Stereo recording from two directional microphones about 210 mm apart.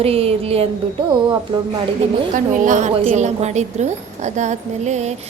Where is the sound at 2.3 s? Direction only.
35° right (ahead or behind).